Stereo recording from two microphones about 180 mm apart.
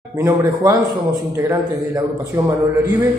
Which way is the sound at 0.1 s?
20° right (ahead or behind).